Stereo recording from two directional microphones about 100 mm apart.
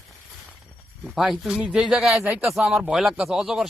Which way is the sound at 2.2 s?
25° right (ahead or behind).